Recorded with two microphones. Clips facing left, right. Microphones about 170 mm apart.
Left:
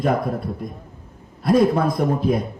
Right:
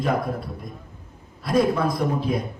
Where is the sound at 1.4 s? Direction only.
50° left (ahead or behind).